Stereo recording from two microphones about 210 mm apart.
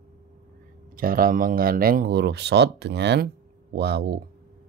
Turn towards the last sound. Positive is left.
turn(degrees=-50)  # may be behind; listen again after turning